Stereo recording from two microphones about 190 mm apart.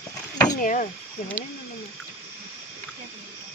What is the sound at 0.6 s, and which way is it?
Speech, 40° left (ahead or behind).